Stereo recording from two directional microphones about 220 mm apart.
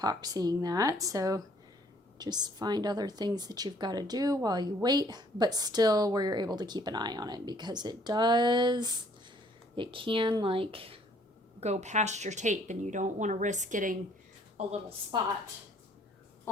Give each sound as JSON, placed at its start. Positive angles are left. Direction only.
{"t": 0.0, "sound": "a woman's voice", "side_deg": -15}
{"t": 14.7, "sound": "speech", "side_deg": -25}